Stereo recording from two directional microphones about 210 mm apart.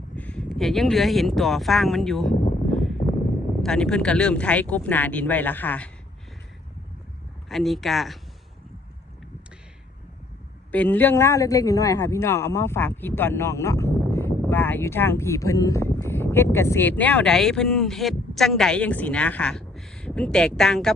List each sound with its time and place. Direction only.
0.2 s speech: 5° left (ahead or behind)
2.3 s speech: 35° left (ahead or behind)
2.6 s a sound: centre (ahead or behind)
3.6 s speech: 5° left (ahead or behind)
7.4 s speech: centre (ahead or behind)
10.7 s speech: 10° left (ahead or behind)